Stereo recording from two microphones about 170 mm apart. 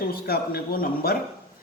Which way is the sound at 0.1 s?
60° left (ahead or behind).